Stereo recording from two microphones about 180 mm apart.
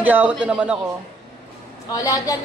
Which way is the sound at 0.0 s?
10° right (ahead or behind).